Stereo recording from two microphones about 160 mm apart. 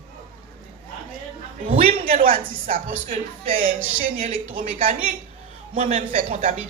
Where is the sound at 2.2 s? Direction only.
55° right (ahead or behind).